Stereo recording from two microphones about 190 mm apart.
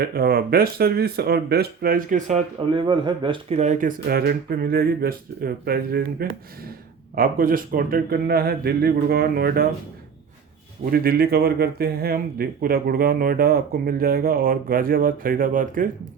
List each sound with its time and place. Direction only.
0.0 s speech: 50° right (ahead or behind)
2.6 s speech: 25° right (ahead or behind); by 9.6 s 50° right (ahead or behind)
10.9 s speech: 55° right (ahead or behind)